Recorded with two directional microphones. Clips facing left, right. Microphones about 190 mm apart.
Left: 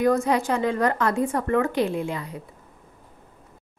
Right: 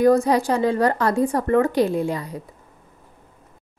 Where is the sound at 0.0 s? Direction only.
35° right (ahead or behind).